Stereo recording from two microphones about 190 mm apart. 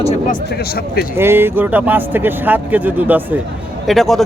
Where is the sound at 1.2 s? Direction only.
10° right (ahead or behind).